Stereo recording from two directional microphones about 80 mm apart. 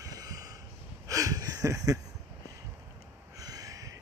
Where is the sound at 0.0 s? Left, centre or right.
Right.